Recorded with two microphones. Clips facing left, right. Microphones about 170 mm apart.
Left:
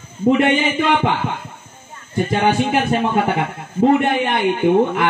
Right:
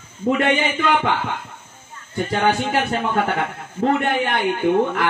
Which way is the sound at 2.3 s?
20° left (ahead or behind).